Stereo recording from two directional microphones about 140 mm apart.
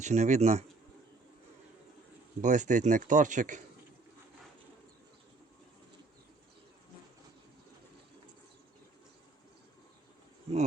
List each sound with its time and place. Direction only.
0.0 s speech: 55° right (ahead or behind)
2.4 s speech: 60° right (ahead or behind)